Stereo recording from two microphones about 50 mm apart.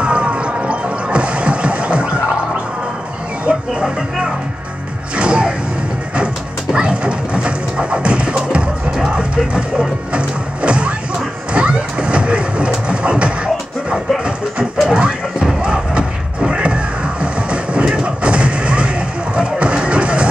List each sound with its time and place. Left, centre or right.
0.0 s music: right
3.5 s music: right
5.1 s music: right
6.1 s a sound: centre
11.5 s vehicle: right
14.9 s music: centre